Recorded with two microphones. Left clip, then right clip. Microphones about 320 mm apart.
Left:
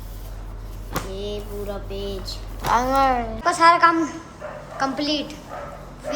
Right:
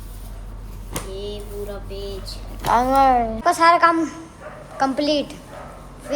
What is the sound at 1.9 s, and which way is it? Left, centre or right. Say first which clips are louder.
Speech: left 1 dB; centre.